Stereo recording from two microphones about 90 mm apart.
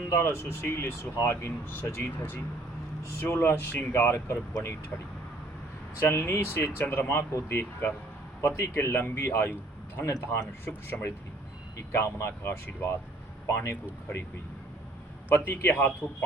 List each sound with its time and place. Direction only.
0.1 s speech: 30° left (ahead or behind)
6.0 s speech: 30° left (ahead or behind)
8.4 s speech: 30° left (ahead or behind)
15.4 s speech: 25° left (ahead or behind)